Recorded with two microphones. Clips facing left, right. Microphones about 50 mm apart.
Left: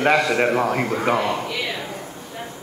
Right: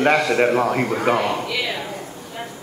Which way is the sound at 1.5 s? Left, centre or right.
Right.